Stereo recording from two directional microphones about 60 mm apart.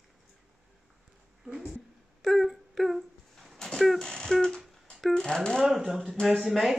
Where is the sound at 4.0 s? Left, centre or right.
Centre.